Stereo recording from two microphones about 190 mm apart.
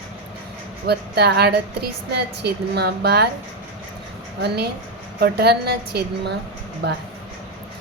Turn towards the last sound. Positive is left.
turn(degrees=-60)  # may be behind; listen again after turning